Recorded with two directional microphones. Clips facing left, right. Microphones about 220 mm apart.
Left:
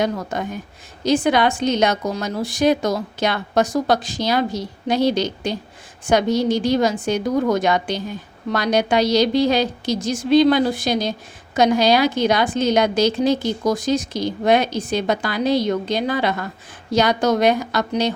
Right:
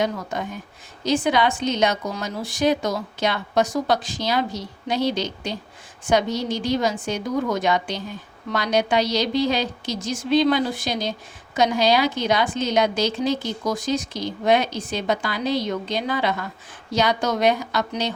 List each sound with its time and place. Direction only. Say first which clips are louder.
0.0 s a woman's voice: left 3 dB; 45° left (ahead or behind)